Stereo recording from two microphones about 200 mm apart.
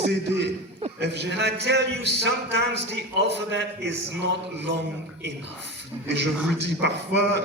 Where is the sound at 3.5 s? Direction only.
60° right (ahead or behind).